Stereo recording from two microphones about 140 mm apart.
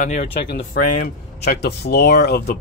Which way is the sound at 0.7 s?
75° left (ahead or behind).